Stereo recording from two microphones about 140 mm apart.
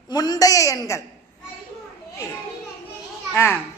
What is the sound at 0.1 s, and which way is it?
Speech, 30° left (ahead or behind).